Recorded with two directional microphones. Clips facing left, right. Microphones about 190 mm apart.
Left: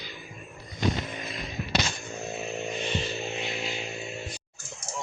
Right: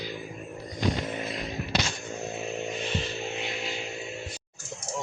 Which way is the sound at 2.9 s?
Centre (ahead or behind).